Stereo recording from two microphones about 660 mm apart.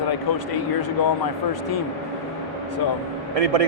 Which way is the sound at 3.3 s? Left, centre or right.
Right.